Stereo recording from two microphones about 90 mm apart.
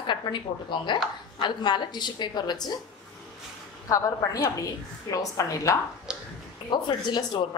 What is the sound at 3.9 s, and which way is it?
A woman's voice, 40° left (ahead or behind).